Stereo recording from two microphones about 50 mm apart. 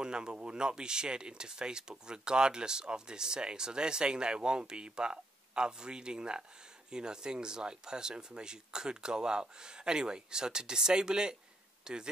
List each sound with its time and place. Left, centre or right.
0.0 s speech: centre